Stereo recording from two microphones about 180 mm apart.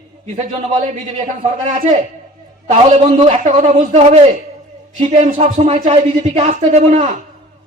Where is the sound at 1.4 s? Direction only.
40° right (ahead or behind).